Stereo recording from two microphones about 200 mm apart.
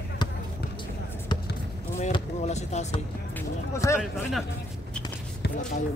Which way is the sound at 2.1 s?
35° left (ahead or behind).